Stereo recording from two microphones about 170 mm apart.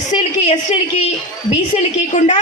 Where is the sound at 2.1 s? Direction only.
45° left (ahead or behind).